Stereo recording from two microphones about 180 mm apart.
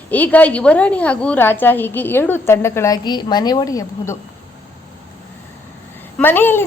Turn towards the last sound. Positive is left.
turn(degrees=10)  # may be behind; listen again after turning